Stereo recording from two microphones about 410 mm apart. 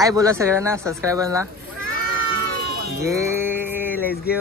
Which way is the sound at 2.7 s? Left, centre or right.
Right.